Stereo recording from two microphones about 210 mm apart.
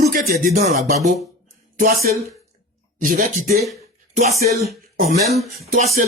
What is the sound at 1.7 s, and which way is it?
Speech, 45° right (ahead or behind).